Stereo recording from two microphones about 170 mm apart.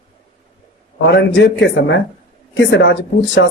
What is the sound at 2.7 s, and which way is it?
Speech, 90° left.